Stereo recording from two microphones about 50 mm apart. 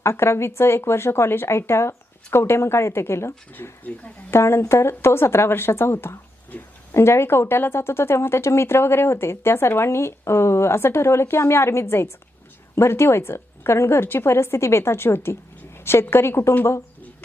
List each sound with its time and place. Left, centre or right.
0.0 s speech: left
3.5 s speech: left
4.3 s speech: left